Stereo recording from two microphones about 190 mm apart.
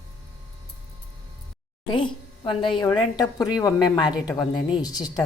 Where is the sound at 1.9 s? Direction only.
25° left (ahead or behind).